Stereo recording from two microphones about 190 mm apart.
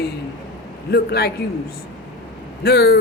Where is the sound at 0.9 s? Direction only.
55° left (ahead or behind).